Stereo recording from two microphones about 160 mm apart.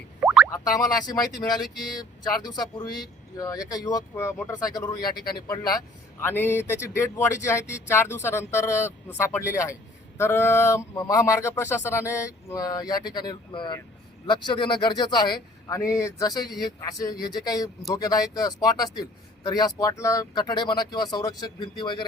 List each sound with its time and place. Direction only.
0.2 s boing: 10° right (ahead or behind)
0.5 s speech: 20° left (ahead or behind)
6.2 s speech: 15° left (ahead or behind); by 22.0 s 30° left (ahead or behind)